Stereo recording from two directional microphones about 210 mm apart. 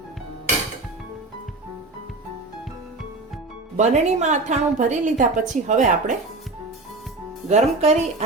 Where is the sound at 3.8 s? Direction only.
35° right (ahead or behind).